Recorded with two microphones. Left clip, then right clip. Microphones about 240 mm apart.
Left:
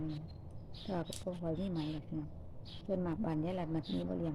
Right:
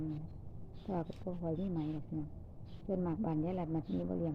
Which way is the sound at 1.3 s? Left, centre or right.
Centre.